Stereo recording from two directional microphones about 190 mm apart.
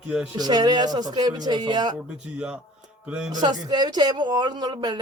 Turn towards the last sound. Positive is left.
turn(degrees=-20)  # may be behind; listen again after turning